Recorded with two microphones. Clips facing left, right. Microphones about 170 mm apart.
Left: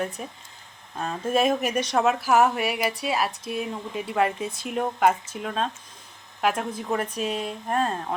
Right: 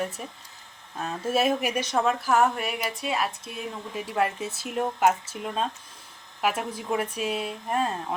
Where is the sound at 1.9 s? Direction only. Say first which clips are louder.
Left 3 dB; 5° left (ahead or behind).